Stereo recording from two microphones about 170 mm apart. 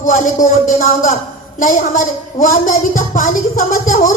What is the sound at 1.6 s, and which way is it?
A woman's voice, 50° left (ahead or behind).